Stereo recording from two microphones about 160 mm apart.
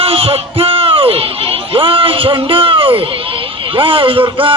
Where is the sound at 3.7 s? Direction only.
35° right (ahead or behind).